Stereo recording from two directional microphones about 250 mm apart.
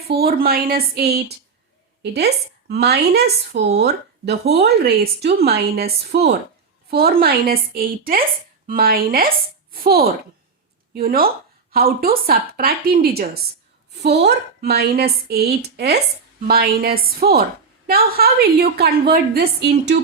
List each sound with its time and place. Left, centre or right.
0.1 s a woman's voice: right